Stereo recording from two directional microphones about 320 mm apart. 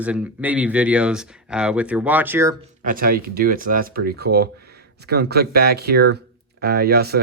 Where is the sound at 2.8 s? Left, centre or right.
Right.